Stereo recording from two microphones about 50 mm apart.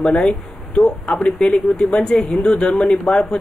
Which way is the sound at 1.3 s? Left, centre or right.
Centre.